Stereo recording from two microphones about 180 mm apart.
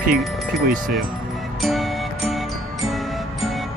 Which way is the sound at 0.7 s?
55° right (ahead or behind).